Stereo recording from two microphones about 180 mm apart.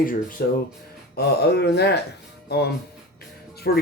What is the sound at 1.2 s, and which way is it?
Speech, 65° left (ahead or behind).